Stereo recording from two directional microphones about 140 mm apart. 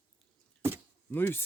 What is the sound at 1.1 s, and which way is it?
Speech, 15° left (ahead or behind).